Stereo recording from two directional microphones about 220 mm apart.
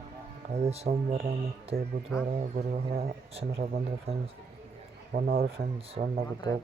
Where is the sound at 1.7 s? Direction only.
45° right (ahead or behind).